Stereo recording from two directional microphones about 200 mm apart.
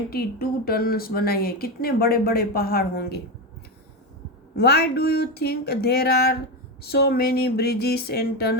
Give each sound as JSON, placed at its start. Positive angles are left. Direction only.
{"t": 0.1, "sound": "speech", "side_deg": 50}
{"t": 4.5, "sound": "speech", "side_deg": 55}